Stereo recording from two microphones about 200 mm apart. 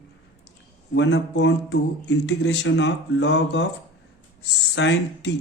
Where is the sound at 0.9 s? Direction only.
65° left (ahead or behind).